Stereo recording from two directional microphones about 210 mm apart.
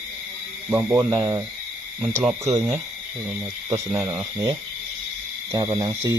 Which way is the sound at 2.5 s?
10° right (ahead or behind).